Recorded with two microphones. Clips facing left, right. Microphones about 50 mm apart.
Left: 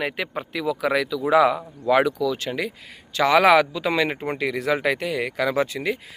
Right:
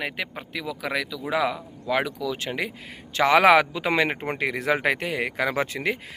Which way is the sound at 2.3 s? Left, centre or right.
Right.